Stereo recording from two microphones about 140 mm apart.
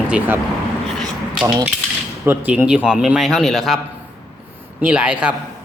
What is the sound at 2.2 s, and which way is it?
A man's voice, 15° right (ahead or behind).